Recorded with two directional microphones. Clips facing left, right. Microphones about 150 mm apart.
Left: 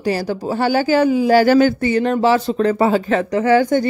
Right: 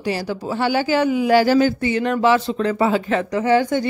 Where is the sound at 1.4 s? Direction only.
60° left (ahead or behind).